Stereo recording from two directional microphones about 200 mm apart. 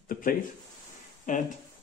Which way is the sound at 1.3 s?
40° left (ahead or behind).